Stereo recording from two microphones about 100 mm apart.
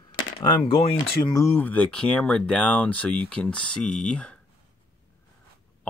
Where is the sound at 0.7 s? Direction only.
60° left (ahead or behind).